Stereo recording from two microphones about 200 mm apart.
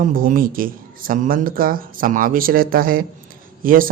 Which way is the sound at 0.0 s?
45° right (ahead or behind).